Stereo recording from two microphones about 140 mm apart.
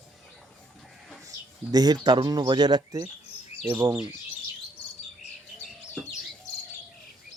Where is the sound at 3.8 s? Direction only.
15° right (ahead or behind).